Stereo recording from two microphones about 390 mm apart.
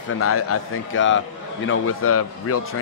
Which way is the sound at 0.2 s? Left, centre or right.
Left.